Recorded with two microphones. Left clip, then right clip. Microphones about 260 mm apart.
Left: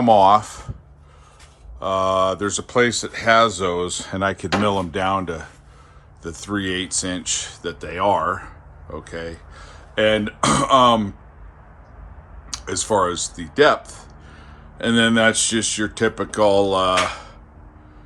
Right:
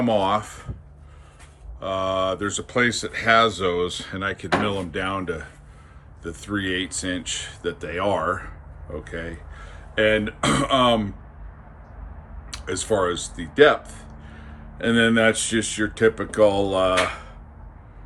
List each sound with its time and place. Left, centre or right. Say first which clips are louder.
0.0 s speech: left 8 dB; centre
1.8 s speech: left 5 dB; centre
12.5 s speech: left 2 dB; centre